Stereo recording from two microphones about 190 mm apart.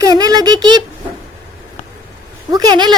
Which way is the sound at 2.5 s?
20° right (ahead or behind).